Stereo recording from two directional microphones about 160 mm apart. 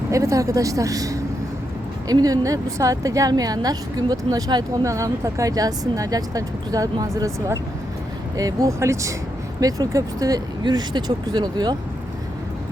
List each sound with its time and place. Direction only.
0.1 s speech: 20° right (ahead or behind)